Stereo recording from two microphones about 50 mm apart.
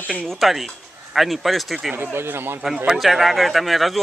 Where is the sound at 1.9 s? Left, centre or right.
Right.